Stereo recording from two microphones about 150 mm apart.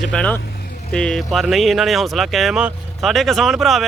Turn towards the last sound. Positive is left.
turn(degrees=0)  # may be behind; listen again after turning